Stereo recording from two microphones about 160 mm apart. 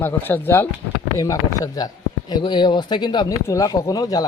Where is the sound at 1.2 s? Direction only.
20° left (ahead or behind).